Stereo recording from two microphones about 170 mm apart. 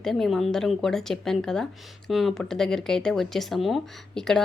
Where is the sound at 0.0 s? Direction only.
Centre (ahead or behind).